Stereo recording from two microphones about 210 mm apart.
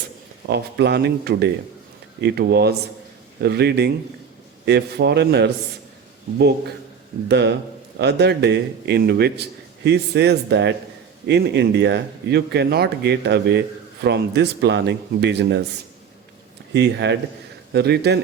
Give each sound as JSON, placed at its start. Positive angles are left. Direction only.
{"t": 0.4, "sound": "speech", "side_deg": -50}
{"t": 7.3, "sound": "speech", "side_deg": -55}
{"t": 16.7, "sound": "speech", "side_deg": -55}